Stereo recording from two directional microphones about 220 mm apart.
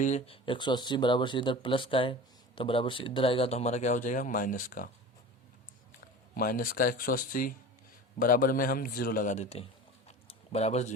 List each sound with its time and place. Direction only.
0.0 s speech: 30° left (ahead or behind)
6.3 s speech: 40° left (ahead or behind)
10.1 s a sound: 30° left (ahead or behind)